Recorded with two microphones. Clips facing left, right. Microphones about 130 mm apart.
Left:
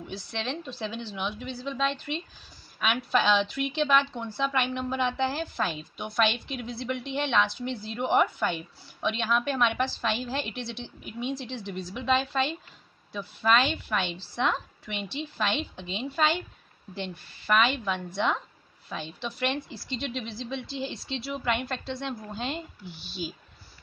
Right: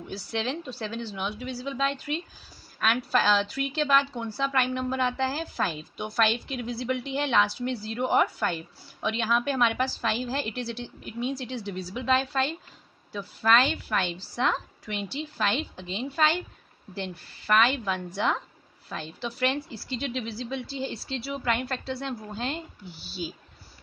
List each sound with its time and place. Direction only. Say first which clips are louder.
0.0 s a woman's voice: right 3 dB; 5° right (ahead or behind)